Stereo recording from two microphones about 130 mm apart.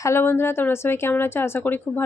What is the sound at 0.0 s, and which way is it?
A woman's voice, 20° left (ahead or behind).